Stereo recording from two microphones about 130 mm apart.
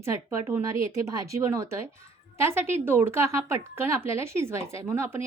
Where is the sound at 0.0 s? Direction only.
20° right (ahead or behind).